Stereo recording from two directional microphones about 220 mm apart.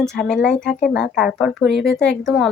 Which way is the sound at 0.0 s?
5° left (ahead or behind).